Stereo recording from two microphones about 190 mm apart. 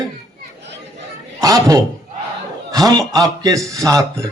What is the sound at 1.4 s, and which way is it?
A man's voice, 20° right (ahead or behind).